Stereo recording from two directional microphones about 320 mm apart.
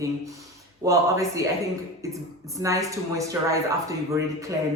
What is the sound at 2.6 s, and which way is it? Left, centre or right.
A woman's voice, centre.